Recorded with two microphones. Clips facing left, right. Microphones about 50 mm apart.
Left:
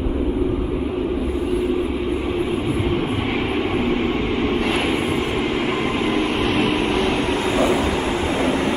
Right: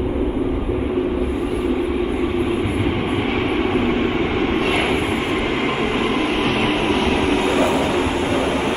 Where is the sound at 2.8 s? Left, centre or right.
Centre.